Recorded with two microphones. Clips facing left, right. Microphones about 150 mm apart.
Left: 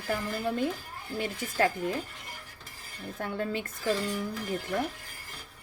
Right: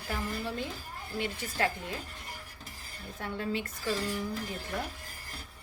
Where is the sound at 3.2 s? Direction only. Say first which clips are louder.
Left 2 dB; 50° left (ahead or behind).